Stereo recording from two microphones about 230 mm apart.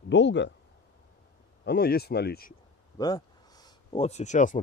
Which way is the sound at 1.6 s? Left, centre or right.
Left.